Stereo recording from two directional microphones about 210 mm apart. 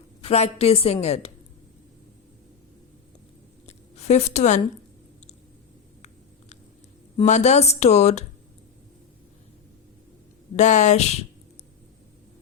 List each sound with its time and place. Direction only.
0.2 s a woman's voice: 30° left (ahead or behind)
3.7 s a sound: 30° left (ahead or behind)
7.2 s speech: 35° left (ahead or behind)
10.6 s speech: 35° left (ahead or behind)